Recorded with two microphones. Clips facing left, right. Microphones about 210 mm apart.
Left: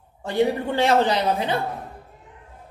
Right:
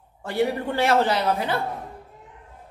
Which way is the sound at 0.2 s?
20° left (ahead or behind).